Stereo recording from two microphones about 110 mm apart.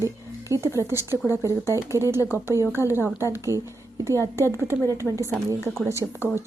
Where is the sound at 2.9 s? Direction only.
20° right (ahead or behind).